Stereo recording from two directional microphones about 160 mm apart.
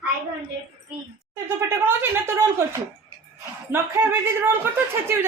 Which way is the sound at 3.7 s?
15° right (ahead or behind).